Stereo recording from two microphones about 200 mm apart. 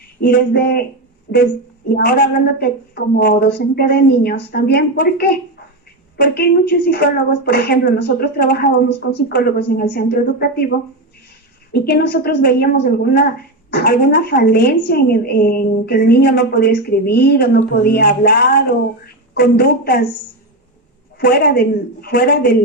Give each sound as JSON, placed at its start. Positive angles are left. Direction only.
{"t": 0.2, "sound": "a woman's voice", "side_deg": 55}
{"t": 1.9, "sound": "a woman's voice", "side_deg": 50}
{"t": 11.7, "sound": "a woman's voice", "side_deg": 55}
{"t": 21.2, "sound": "a woman's voice", "side_deg": 50}